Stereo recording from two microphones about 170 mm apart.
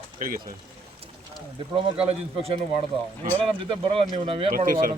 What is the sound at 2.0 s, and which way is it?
Speech, 35° right (ahead or behind).